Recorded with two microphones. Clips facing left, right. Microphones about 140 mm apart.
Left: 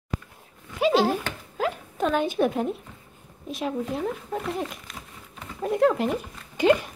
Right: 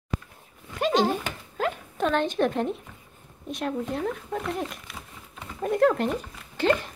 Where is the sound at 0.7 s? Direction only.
5° left (ahead or behind).